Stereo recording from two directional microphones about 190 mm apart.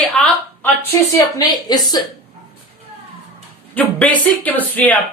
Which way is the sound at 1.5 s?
20° left (ahead or behind).